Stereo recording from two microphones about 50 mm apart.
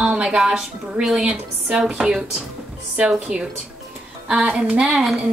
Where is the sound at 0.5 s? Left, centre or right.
Centre.